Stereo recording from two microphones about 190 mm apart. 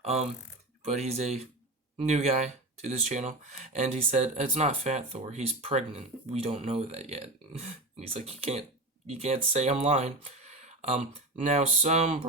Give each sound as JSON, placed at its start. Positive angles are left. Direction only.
{"t": 0.0, "sound": "speech", "side_deg": -35}